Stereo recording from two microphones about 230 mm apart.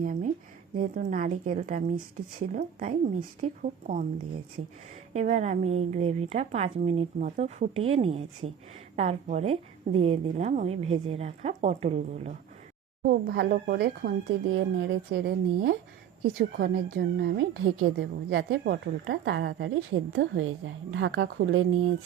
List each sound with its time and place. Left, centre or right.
0.0 s a sound: right
0.8 s a woman's voice: right
5.1 s a woman's voice: right
13.1 s a woman's voice: right